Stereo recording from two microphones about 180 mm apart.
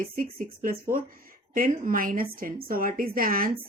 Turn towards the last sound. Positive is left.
turn(degrees=-55)  # may be behind; listen again after turning